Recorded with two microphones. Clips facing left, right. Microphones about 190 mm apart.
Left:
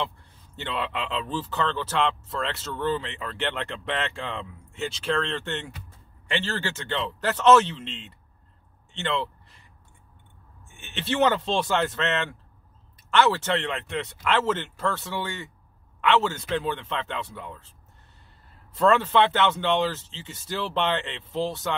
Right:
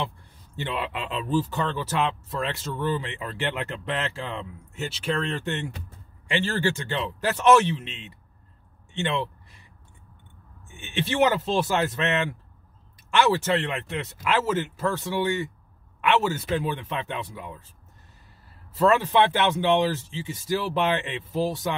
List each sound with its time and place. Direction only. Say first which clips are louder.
0.7 s speech: left 1 dB; 10° right (ahead or behind)
9.0 s a sound: right 1 dB; 15° right (ahead or behind)
10.9 s speech: right 1 dB; 10° right (ahead or behind)
18.8 s speech: even; 10° right (ahead or behind)